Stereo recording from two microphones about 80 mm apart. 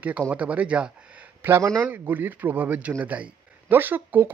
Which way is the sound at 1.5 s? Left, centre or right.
Right.